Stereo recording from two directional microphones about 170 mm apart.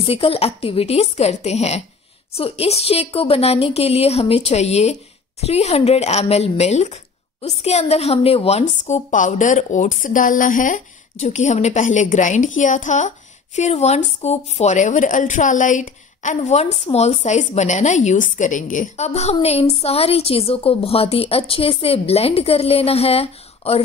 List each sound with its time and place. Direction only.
0.0 s a woman's voice: 35° left (ahead or behind)